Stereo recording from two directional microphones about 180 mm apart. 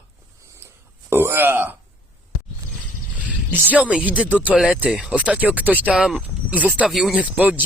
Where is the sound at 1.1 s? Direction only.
15° right (ahead or behind).